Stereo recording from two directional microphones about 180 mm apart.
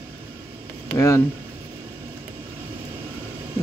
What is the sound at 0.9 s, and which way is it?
Speech, 15° left (ahead or behind).